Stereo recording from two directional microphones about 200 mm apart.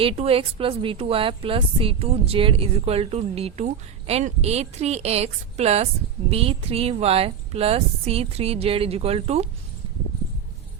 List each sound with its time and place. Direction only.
0.0 s a woman's voice: 30° right (ahead or behind)